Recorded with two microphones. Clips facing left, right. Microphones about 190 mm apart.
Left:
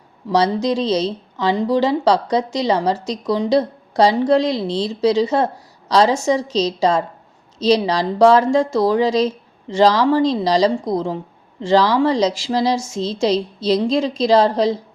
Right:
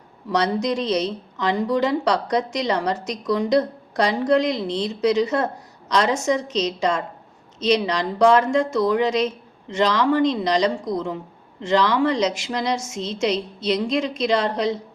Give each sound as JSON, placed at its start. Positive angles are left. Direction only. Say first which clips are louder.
{"t": 0.3, "sound": "a woman's voice", "louder": "left 4 dB", "side_deg": 30}